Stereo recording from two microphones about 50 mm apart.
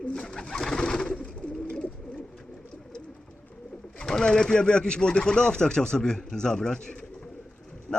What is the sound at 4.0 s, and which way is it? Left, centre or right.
Speech, centre.